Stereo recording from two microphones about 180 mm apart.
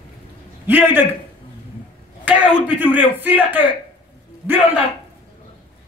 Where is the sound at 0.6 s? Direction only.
10° right (ahead or behind).